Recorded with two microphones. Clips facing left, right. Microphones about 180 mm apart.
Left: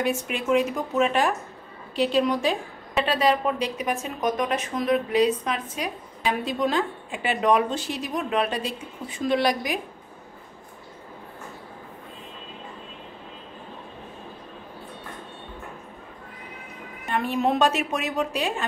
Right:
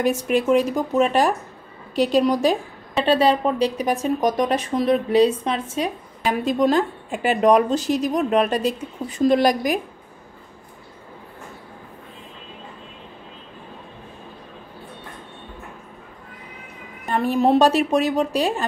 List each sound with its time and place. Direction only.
0.3 s speech: 40° right (ahead or behind)
6.2 s a woman's voice: 40° right (ahead or behind)
17.0 s speech: 40° right (ahead or behind)